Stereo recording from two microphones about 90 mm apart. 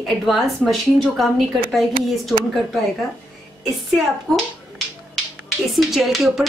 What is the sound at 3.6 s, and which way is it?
Speech, centre (ahead or behind).